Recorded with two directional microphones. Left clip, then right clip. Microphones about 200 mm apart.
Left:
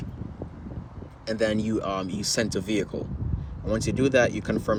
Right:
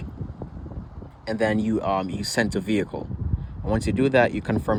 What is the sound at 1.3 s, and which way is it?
Speech, 35° right (ahead or behind).